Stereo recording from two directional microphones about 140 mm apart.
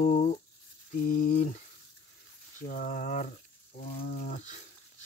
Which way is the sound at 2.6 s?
75° left (ahead or behind).